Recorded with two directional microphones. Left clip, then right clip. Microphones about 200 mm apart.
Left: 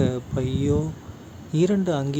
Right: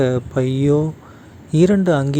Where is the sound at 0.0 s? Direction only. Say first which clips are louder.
Right 8 dB; 35° right (ahead or behind).